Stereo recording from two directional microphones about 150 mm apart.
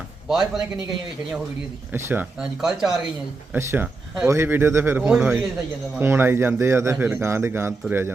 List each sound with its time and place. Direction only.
0.3 s speech: 5° right (ahead or behind)
1.9 s speech: 15° right (ahead or behind)
3.5 s a man's voice: 15° right (ahead or behind)
5.0 s speech: 5° right (ahead or behind)
6.0 s a man's voice: 15° right (ahead or behind)